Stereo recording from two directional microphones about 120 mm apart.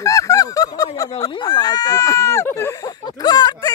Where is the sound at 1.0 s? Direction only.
30° left (ahead or behind).